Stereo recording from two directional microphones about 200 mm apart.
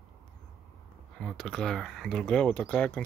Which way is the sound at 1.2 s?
Centre (ahead or behind).